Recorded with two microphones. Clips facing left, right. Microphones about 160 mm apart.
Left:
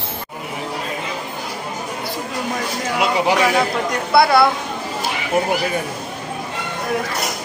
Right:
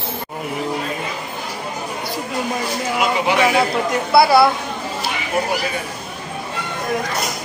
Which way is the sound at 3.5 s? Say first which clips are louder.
Right 1 dB; 5° right (ahead or behind).